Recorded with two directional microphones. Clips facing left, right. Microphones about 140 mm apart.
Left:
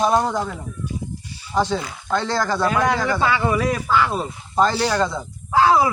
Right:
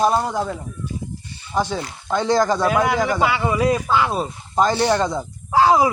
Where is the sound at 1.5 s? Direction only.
10° right (ahead or behind).